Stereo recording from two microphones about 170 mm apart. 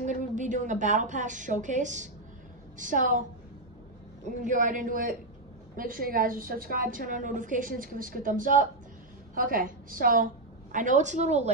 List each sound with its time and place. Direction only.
0.0 s a woman's voice: 45° right (ahead or behind)
4.3 s a woman's voice: 50° right (ahead or behind)